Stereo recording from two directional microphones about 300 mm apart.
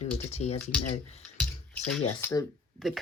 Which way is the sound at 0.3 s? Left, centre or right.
Left.